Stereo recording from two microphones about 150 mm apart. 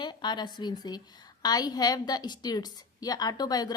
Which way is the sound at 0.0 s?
30° left (ahead or behind).